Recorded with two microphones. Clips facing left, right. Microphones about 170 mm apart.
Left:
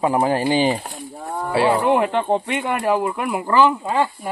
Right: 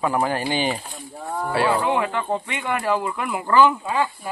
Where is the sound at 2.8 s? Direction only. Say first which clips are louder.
Left 4 dB; 15° left (ahead or behind).